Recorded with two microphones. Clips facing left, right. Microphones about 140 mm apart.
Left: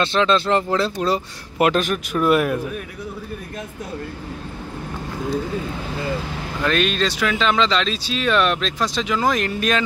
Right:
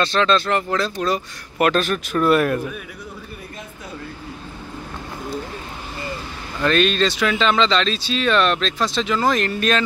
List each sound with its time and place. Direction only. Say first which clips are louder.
0.0 s speech: even; 20° left (ahead or behind)
1.7 s speech: even; 15° left (ahead or behind)
6.6 s speech: right 3 dB; 5° left (ahead or behind)